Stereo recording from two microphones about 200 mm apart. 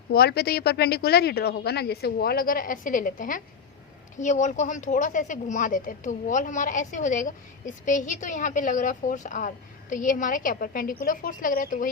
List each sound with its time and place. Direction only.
0.1 s speech: 50° left (ahead or behind)